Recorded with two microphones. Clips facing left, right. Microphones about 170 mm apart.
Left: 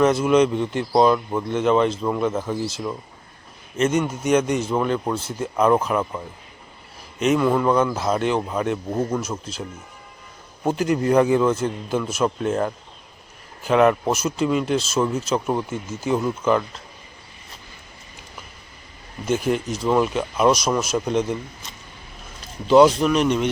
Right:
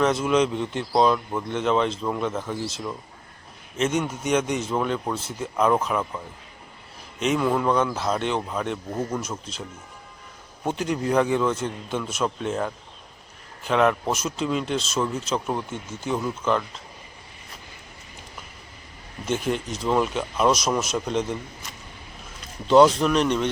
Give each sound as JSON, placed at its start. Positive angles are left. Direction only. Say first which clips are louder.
{"t": 0.0, "sound": "speech", "louder": "left 4 dB", "side_deg": 5}
{"t": 8.9, "sound": "speech", "louder": "left 5 dB", "side_deg": 20}
{"t": 9.1, "sound": "speech", "louder": "left 4 dB", "side_deg": 0}
{"t": 10.7, "sound": "speech", "louder": "left 5 dB", "side_deg": 5}
{"t": 19.2, "sound": "speech", "louder": "left 4 dB", "side_deg": 5}
{"t": 22.6, "sound": "speech", "louder": "left 2 dB", "side_deg": 5}